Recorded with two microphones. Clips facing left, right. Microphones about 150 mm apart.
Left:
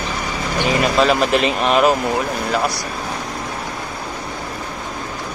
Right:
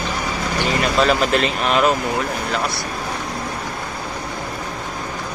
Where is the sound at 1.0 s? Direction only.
5° left (ahead or behind).